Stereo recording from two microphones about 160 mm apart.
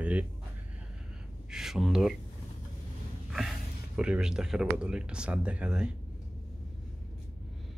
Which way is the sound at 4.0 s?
5° right (ahead or behind).